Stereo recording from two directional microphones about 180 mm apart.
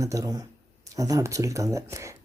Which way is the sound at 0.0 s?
20° right (ahead or behind).